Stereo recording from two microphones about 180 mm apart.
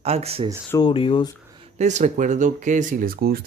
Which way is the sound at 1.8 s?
40° right (ahead or behind).